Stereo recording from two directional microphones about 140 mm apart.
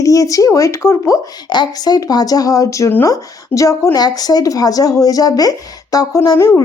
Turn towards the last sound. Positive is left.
turn(degrees=20)  # may be behind; listen again after turning